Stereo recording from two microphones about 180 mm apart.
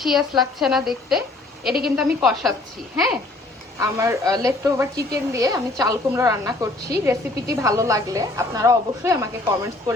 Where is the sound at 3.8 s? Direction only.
15° right (ahead or behind).